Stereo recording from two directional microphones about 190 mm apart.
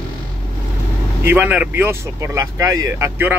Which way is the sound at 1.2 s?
10° right (ahead or behind).